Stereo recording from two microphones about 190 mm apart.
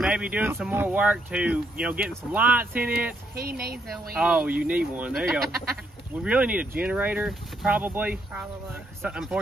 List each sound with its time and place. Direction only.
0.0 s speech: 5° right (ahead or behind)
3.3 s a woman's voice: 55° right (ahead or behind)
4.1 s speech: 5° right (ahead or behind)